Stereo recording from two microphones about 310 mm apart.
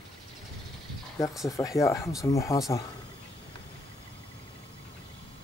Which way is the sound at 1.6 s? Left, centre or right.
Centre.